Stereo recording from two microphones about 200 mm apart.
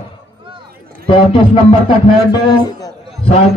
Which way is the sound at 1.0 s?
25° left (ahead or behind).